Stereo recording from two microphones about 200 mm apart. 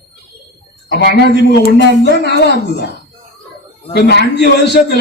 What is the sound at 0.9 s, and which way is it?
A man's voice, 50° left (ahead or behind).